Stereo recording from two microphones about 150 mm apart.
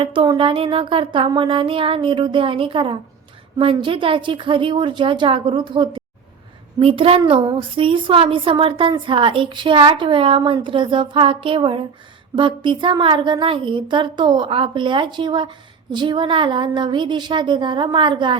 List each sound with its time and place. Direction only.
0.0 s a woman's voice: 35° right (ahead or behind)